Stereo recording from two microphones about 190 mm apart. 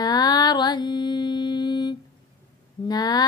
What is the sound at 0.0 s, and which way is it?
Mantra, 20° left (ahead or behind).